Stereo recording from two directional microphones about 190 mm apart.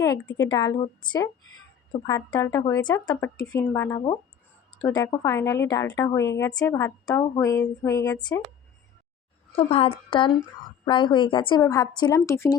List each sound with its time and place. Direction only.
0.4 s a woman's voice: 20° left (ahead or behind)
9.6 s a woman's voice: 30° left (ahead or behind); by 12.5 s 15° left (ahead or behind)